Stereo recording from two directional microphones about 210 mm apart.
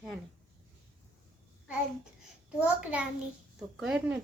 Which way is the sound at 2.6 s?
5° right (ahead or behind).